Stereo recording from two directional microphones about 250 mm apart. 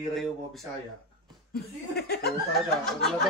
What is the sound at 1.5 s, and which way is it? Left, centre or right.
Speech, left.